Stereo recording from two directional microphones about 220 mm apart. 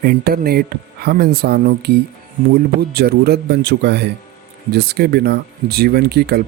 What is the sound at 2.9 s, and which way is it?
Speech, 45° right (ahead or behind).